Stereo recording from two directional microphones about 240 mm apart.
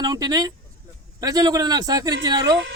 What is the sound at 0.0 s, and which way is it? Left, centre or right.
A man's voice, centre.